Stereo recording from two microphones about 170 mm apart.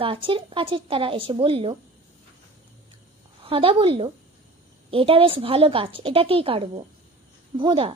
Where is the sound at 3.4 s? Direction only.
30° right (ahead or behind).